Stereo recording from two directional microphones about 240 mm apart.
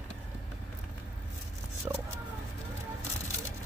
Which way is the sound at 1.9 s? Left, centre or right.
Centre.